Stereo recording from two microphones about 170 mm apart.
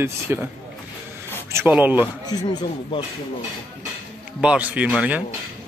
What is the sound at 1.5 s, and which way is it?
Speech, 10° right (ahead or behind).